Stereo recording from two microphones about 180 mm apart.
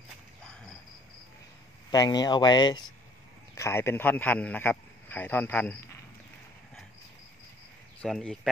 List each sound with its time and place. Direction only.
1.9 s a man's voice: 20° left (ahead or behind)
8.0 s speech: 5° left (ahead or behind)